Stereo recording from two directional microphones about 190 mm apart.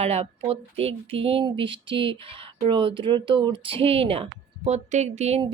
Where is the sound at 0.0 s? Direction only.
35° right (ahead or behind).